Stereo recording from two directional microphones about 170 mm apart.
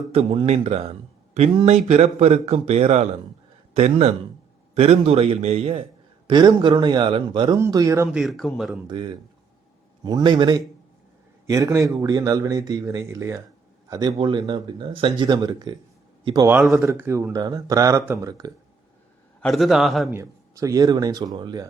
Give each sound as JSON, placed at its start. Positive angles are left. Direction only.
{"t": 0.1, "sound": "a man's voice", "side_deg": -35}
{"t": 8.1, "sound": "speech", "side_deg": 0}
{"t": 8.9, "sound": "a man's voice", "side_deg": -30}
{"t": 16.5, "sound": "speech", "side_deg": -10}
{"t": 19.4, "sound": "speech", "side_deg": 0}
{"t": 20.1, "sound": "speech", "side_deg": -15}